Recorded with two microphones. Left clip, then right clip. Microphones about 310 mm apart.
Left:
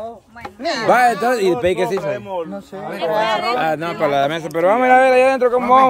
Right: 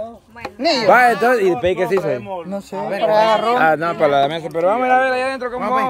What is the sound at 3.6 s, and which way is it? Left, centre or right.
Speech, centre.